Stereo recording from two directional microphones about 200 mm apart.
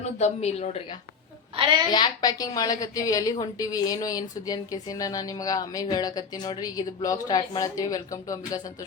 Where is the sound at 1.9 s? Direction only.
20° left (ahead or behind).